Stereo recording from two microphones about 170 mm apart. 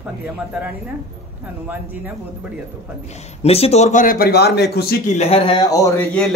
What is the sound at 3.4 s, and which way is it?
Speech, 35° left (ahead or behind).